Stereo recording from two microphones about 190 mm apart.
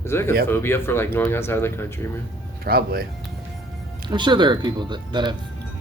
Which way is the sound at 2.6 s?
55° right (ahead or behind).